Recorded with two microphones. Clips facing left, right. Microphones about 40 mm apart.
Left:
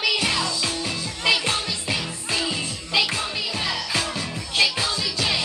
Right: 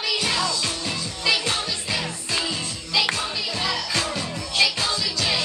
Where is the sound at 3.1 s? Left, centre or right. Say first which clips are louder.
Even; centre.